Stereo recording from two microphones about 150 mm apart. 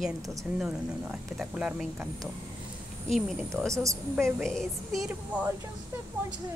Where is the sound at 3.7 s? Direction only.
20° right (ahead or behind).